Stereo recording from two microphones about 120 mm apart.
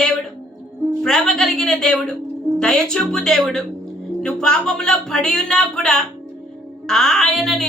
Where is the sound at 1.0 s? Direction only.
5° left (ahead or behind).